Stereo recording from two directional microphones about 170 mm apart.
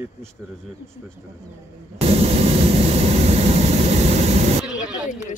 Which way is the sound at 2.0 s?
35° right (ahead or behind).